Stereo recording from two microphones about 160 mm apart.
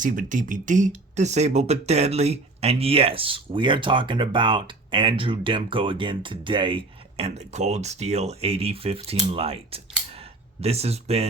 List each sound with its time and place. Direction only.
0.0 s speech: 55° right (ahead or behind)